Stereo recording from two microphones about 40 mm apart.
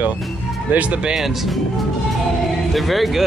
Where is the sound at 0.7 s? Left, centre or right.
Right.